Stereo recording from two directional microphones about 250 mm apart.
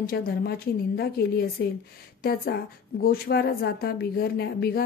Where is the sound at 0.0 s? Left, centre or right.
Left.